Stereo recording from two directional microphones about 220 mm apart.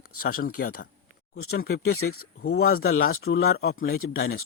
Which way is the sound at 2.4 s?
45° left (ahead or behind).